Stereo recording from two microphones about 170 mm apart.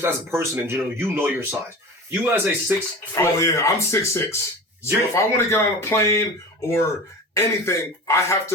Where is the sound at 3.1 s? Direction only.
15° left (ahead or behind).